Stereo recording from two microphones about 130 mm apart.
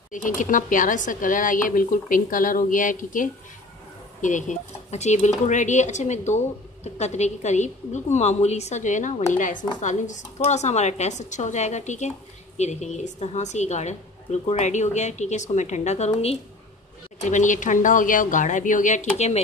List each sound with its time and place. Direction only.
0.1 s speech: 85° left
4.2 s a woman's voice: 70° left (ahead or behind)
9.8 s a woman's voice: 70° left (ahead or behind); by 16.3 s 50° left (ahead or behind)
17.2 s speech: 70° left (ahead or behind)